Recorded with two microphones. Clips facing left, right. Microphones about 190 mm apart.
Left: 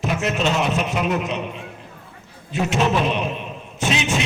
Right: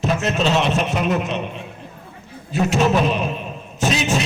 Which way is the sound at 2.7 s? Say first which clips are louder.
Right 2 dB; 40° right (ahead or behind).